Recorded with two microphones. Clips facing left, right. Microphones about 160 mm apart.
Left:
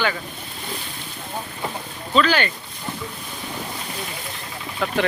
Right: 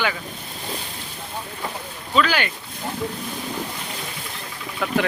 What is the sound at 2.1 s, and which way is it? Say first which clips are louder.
Speech: left 2 dB; 10° right (ahead or behind).